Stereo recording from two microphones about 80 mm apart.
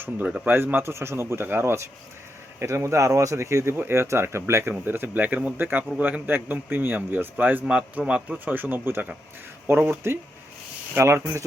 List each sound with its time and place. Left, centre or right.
0.4 s a man's voice: right